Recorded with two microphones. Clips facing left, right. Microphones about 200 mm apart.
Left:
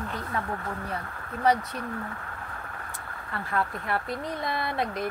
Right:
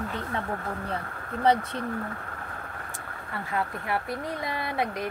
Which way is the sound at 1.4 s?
30° right (ahead or behind).